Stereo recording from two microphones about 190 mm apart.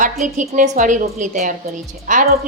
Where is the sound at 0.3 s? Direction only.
40° right (ahead or behind).